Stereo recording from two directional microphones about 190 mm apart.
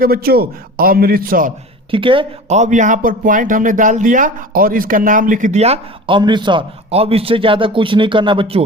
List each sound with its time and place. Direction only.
0.0 s a man's voice: 50° right (ahead or behind)
1.9 s speech: 25° right (ahead or behind)